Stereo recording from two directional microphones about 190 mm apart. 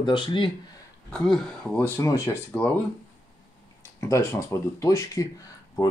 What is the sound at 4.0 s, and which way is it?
Speech, 15° left (ahead or behind).